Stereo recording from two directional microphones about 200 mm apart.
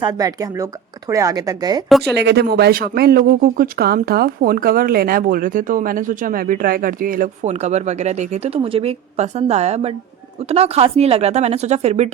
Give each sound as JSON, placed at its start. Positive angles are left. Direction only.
{"t": 0.0, "sound": "speech", "side_deg": -20}
{"t": 2.1, "sound": "speech", "side_deg": -55}